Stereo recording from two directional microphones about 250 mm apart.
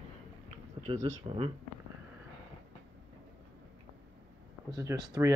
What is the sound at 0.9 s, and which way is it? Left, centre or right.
Speech, right.